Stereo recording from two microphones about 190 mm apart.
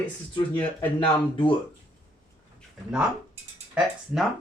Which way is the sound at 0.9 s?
25° left (ahead or behind).